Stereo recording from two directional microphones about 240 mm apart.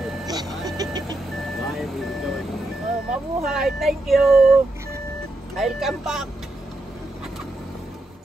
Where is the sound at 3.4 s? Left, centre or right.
Centre.